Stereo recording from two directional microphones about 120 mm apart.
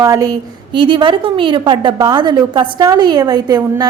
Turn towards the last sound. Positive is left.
turn(degrees=-35)  # may be behind; listen again after turning